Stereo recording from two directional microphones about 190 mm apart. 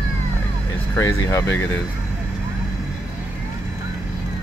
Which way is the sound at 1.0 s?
15° left (ahead or behind).